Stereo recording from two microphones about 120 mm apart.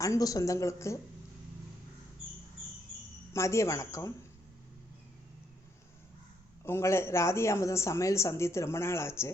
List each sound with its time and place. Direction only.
0.0 s speech: 30° left (ahead or behind)
3.3 s speech: 25° left (ahead or behind)
6.7 s speech: 20° left (ahead or behind)